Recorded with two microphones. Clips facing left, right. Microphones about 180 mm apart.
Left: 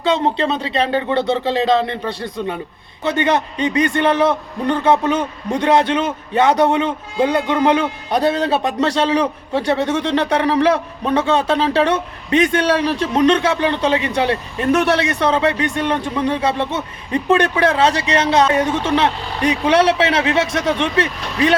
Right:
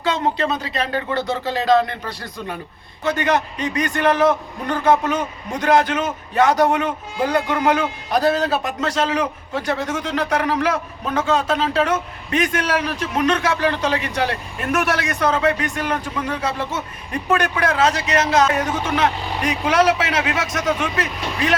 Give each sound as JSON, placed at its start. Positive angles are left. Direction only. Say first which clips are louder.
{"t": 0.0, "sound": "a man's voice", "louder": "left 4 dB", "side_deg": 30}